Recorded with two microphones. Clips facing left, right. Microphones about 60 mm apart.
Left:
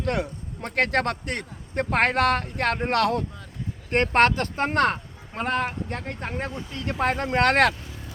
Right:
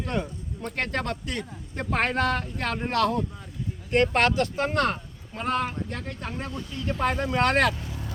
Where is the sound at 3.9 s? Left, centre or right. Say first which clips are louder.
Left 2 dB; left.